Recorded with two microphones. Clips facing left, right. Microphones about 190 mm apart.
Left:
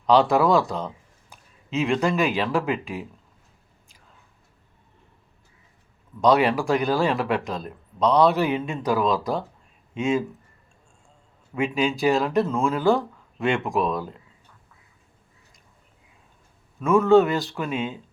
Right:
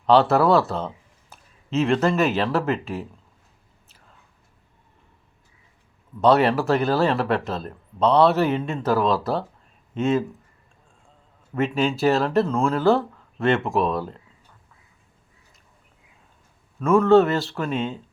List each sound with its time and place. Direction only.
0.2 s speech: 15° left (ahead or behind)
6.2 s speech: 10° left (ahead or behind)
11.5 s speech: 10° left (ahead or behind)
12.5 s speech: centre (ahead or behind)
12.7 s speech: 15° left (ahead or behind)
13.7 s speech: centre (ahead or behind)
16.8 s speech: centre (ahead or behind)
17.2 s speech: 15° left (ahead or behind)
17.5 s speech: 5° left (ahead or behind)